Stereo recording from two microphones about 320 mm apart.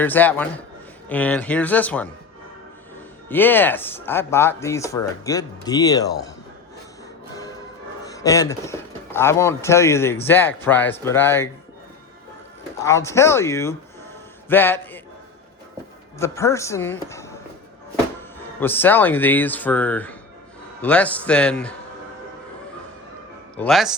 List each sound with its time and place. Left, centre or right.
0.0 s speech: centre
3.2 s speech: centre
8.1 s speech: centre
12.8 s speech: centre
16.1 s speech: centre
23.6 s speech: centre